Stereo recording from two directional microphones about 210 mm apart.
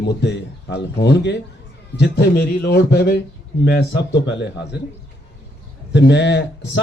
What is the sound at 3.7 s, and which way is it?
A man's voice, 55° left (ahead or behind).